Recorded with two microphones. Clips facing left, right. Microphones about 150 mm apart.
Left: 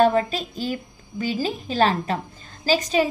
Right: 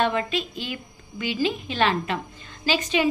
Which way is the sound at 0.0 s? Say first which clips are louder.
Left 5 dB; 40° left (ahead or behind).